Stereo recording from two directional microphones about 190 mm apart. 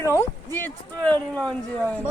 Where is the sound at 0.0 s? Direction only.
15° left (ahead or behind).